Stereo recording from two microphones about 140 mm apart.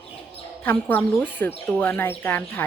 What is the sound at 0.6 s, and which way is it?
Speech, 15° left (ahead or behind).